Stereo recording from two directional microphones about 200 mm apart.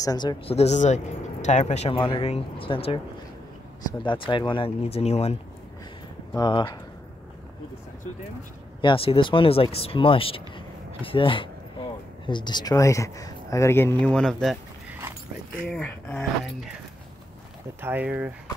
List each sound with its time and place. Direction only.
0.0 s speech: 20° left (ahead or behind)
4.0 s speech: 25° left (ahead or behind)
6.3 s speech: 20° left (ahead or behind)
8.8 s speech: 30° left (ahead or behind); by 14.6 s centre (ahead or behind)
15.7 s speech: 5° left (ahead or behind)
17.7 s speech: 10° right (ahead or behind)